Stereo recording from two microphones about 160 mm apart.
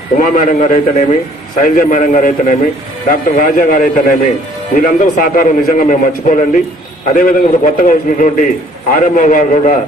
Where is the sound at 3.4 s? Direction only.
60° left (ahead or behind).